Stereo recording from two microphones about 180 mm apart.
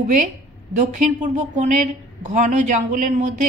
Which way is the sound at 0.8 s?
40° right (ahead or behind).